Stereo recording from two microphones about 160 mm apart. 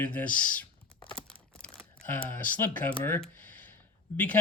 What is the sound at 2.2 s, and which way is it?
Speech, 10° left (ahead or behind).